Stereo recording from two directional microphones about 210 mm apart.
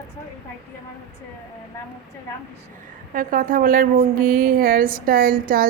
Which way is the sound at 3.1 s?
40° right (ahead or behind).